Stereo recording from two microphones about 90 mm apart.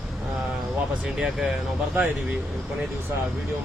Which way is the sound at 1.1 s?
5° right (ahead or behind).